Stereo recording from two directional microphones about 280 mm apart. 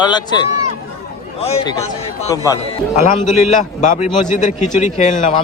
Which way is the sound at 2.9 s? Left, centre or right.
Left.